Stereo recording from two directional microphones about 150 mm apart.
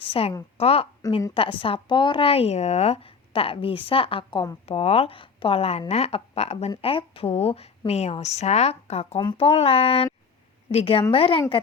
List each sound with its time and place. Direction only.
0.1 s a woman's voice: 40° left (ahead or behind)